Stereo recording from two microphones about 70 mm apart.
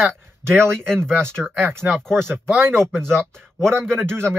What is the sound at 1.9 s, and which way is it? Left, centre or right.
Speech, centre.